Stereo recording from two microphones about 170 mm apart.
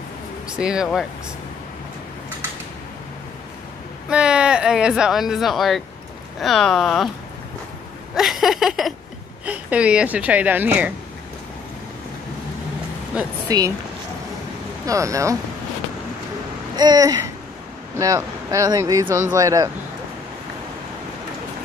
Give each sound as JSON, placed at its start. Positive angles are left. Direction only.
{"t": 0.5, "sound": "speech", "side_deg": -5}
{"t": 4.1, "sound": "speech", "side_deg": -5}
{"t": 8.1, "sound": "speech", "side_deg": 0}
{"t": 13.1, "sound": "speech", "side_deg": -5}
{"t": 13.5, "sound": "speech", "side_deg": -20}
{"t": 14.9, "sound": "speech", "side_deg": -20}
{"t": 16.7, "sound": "speech", "side_deg": -25}